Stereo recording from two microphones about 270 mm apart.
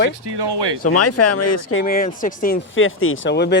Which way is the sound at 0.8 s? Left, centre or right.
Left.